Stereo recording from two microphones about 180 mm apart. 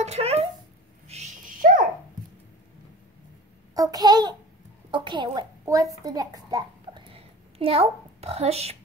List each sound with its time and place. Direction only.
0.0 s speech: 35° right (ahead or behind)
1.0 s dog: 40° right (ahead or behind)
3.7 s a child's voice: 20° right (ahead or behind)
7.1 s a sound: 30° right (ahead or behind)